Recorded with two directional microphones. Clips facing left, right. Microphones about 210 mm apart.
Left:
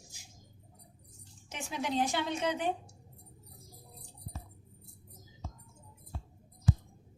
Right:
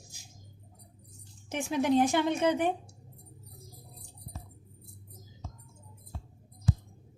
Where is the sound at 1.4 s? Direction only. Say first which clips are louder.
Right 9 dB; 50° right (ahead or behind).